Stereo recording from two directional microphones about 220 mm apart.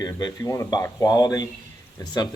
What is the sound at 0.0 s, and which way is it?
Speech, 20° left (ahead or behind).